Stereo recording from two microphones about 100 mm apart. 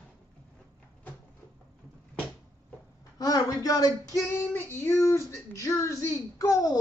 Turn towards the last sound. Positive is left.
turn(degrees=35)  # may be behind; listen again after turning